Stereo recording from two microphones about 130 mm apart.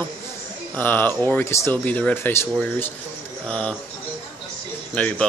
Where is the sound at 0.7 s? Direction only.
15° left (ahead or behind).